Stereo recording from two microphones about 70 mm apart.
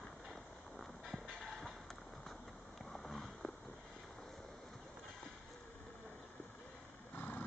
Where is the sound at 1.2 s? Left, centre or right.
Centre.